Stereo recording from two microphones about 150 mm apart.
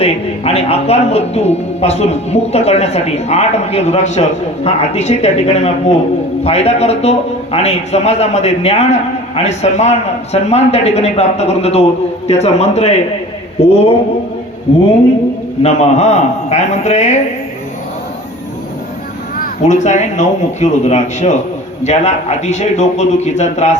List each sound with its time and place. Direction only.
0.0 s a man's voice: 45° left (ahead or behind)
15.6 s a man's voice: 45° left (ahead or behind)
19.4 s a man's voice: 50° left (ahead or behind)